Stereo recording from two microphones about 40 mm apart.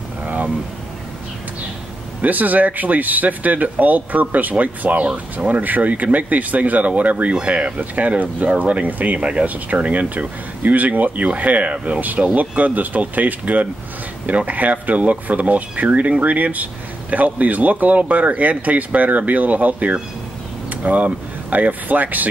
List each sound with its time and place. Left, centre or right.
0.2 s a sound: right
2.2 s speech: right
9.2 s speech: right